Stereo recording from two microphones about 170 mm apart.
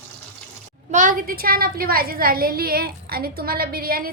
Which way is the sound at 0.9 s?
55° right (ahead or behind).